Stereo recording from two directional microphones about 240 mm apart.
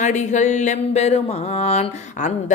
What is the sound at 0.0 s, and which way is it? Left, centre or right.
Music, left.